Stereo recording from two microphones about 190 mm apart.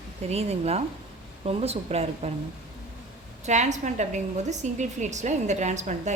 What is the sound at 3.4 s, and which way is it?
A woman's voice, 40° right (ahead or behind).